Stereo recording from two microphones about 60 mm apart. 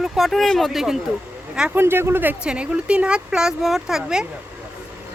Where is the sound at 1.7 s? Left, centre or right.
Right.